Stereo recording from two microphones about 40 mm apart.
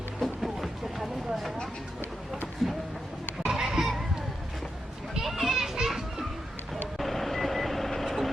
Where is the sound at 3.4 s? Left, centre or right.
Centre.